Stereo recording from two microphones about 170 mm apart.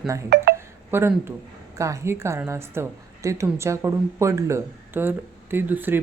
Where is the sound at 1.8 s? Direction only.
15° right (ahead or behind).